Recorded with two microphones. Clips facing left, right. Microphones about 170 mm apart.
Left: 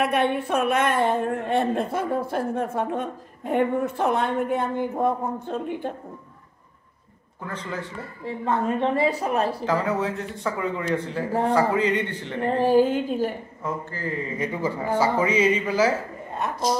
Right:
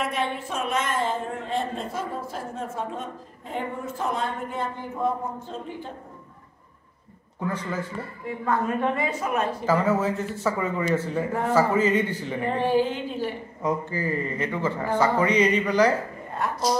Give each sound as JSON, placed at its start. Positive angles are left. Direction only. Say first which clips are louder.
{"t": 0.0, "sound": "a woman's voice", "louder": "left 6 dB", "side_deg": 60}
{"t": 7.4, "sound": "speech", "louder": "right 3 dB", "side_deg": -5}
{"t": 8.3, "sound": "a woman's voice", "louder": "left 1 dB", "side_deg": 25}
{"t": 9.7, "sound": "speech", "louder": "right 2 dB", "side_deg": 0}
{"t": 12.4, "sound": "a sound", "louder": "left 4 dB", "side_deg": 40}
{"t": 13.6, "sound": "speech", "louder": "right 8 dB", "side_deg": -15}
{"t": 14.4, "sound": "speech", "louder": "even", "side_deg": 15}
{"t": 16.4, "sound": "a woman's voice", "louder": "right 1 dB", "side_deg": 20}